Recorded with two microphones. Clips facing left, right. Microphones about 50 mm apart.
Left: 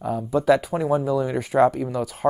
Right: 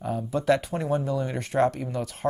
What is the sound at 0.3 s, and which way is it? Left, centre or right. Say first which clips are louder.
Speech: left 5 dB; centre.